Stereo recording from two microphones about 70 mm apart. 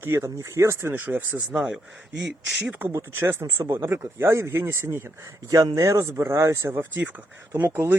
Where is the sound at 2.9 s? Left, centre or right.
Right.